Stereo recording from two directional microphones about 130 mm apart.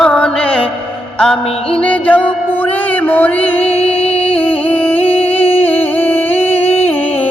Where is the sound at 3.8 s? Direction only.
50° left (ahead or behind).